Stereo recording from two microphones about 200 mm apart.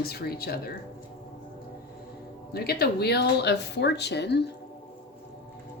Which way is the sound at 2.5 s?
50° left (ahead or behind).